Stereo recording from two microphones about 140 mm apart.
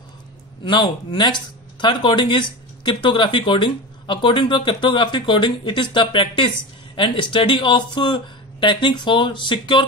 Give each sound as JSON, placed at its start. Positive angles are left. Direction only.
{"t": 0.7, "sound": "speech", "side_deg": 30}